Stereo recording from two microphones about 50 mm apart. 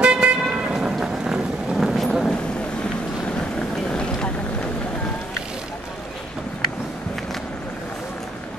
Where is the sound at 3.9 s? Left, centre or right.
Centre.